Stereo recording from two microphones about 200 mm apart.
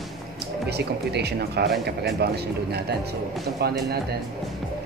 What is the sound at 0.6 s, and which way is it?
Speech, 55° right (ahead or behind).